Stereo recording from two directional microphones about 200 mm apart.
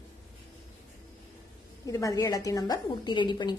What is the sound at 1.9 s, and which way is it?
A woman's voice, 15° left (ahead or behind).